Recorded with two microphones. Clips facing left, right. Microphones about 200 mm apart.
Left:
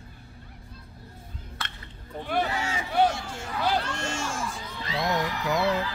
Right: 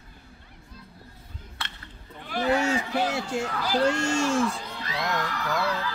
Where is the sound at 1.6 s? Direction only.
Centre (ahead or behind).